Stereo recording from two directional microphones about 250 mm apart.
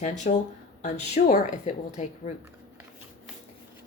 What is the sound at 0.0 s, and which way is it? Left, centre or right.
Speech, left.